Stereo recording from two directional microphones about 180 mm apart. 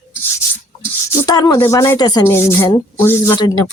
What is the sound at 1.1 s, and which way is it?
Speech, 20° left (ahead or behind).